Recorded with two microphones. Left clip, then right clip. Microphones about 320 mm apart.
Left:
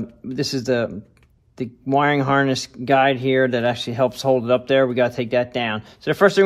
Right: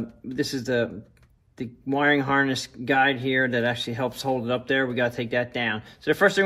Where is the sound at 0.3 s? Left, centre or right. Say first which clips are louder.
Left 5 dB; left.